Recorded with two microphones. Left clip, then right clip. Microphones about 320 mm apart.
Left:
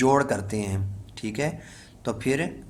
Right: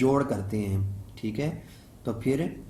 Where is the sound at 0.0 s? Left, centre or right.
Left.